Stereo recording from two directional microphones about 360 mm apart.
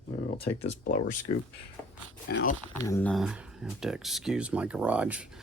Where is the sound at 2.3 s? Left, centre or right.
Left.